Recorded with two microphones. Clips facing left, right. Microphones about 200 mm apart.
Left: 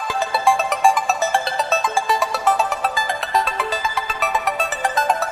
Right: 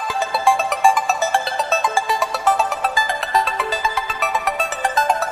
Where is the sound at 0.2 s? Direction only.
Centre (ahead or behind).